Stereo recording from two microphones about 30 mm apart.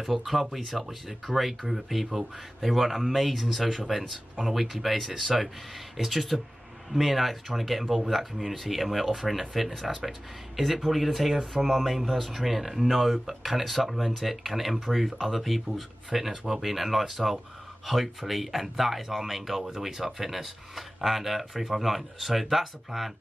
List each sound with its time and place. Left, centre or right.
0.0 s speech: centre